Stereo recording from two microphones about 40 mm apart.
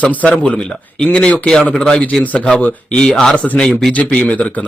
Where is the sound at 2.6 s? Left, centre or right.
Left.